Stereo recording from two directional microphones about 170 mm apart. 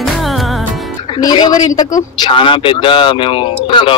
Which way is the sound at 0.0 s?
Centre (ahead or behind).